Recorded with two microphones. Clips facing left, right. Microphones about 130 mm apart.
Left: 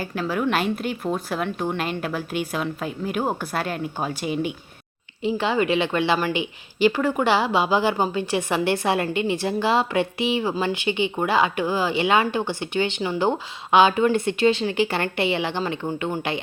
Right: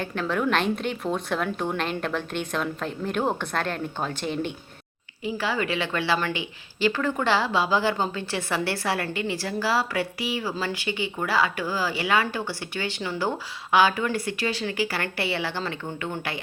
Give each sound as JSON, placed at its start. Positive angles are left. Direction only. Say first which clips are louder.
{"t": 0.0, "sound": "a woman's voice", "louder": "left 1 dB", "side_deg": 5}
{"t": 5.2, "sound": "a woman's voice", "louder": "left 5 dB", "side_deg": 20}